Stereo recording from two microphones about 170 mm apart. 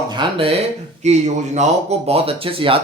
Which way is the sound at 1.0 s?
45° right (ahead or behind).